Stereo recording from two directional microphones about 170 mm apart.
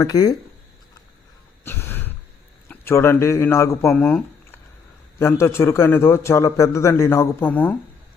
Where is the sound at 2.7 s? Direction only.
15° left (ahead or behind).